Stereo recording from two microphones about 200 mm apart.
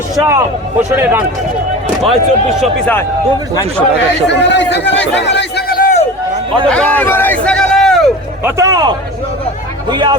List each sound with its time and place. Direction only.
0.2 s a man's voice: 10° right (ahead or behind)
4.3 s a man's voice: 60° left (ahead or behind)
6.7 s speech: 5° left (ahead or behind)
8.4 s a man's voice: 15° right (ahead or behind)